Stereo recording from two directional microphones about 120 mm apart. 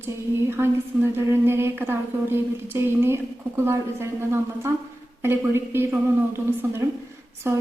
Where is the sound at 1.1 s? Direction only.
20° right (ahead or behind).